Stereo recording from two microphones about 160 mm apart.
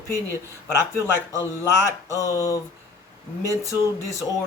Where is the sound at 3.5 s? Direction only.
20° right (ahead or behind).